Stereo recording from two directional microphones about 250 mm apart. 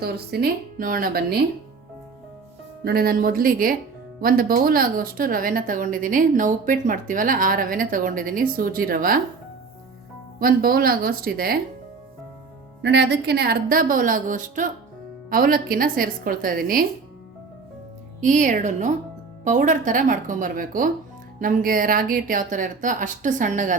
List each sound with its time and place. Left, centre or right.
0.0 s speech: right
2.8 s speech: right
10.4 s speech: right
12.8 s speech: right
18.2 s speech: right